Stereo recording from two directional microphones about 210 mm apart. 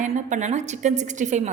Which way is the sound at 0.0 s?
35° right (ahead or behind).